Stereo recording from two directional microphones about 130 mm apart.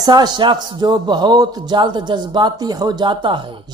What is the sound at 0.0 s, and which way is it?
A man's voice, 30° right (ahead or behind).